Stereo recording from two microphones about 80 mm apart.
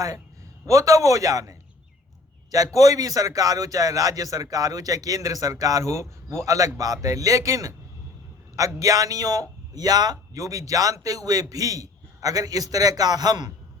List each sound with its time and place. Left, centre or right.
0.6 s a man's voice: right
2.7 s a man's voice: right